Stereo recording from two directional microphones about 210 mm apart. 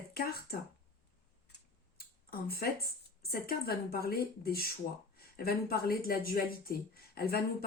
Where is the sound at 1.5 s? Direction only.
45° left (ahead or behind).